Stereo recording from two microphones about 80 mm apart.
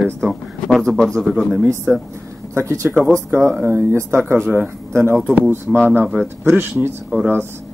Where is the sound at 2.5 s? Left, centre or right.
Right.